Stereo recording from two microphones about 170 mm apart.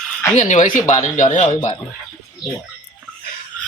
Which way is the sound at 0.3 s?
45° left (ahead or behind).